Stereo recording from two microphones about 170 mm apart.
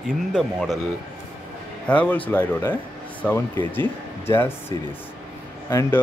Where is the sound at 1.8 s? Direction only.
5° left (ahead or behind).